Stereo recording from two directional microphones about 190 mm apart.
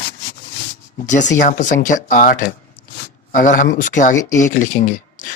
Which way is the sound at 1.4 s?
40° left (ahead or behind).